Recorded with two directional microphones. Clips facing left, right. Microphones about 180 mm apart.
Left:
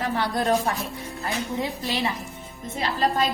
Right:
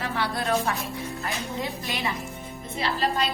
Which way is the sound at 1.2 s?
30° left (ahead or behind).